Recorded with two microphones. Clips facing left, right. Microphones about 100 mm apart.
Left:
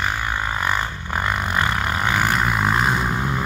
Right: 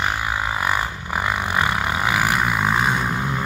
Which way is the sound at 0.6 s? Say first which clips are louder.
Right 1 dB; 5° right (ahead or behind).